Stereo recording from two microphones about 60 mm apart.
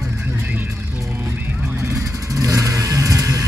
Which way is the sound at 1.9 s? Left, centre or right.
Right.